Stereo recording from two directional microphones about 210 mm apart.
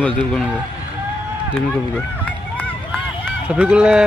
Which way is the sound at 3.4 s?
5° right (ahead or behind).